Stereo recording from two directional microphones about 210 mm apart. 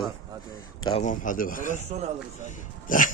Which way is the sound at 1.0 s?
40° left (ahead or behind).